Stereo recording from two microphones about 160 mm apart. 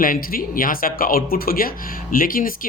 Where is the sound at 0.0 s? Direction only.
65° left (ahead or behind).